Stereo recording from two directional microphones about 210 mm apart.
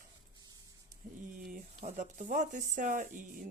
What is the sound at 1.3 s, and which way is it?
Speech, 35° right (ahead or behind).